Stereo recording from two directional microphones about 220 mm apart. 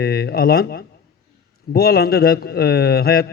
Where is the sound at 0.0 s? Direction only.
45° left (ahead or behind).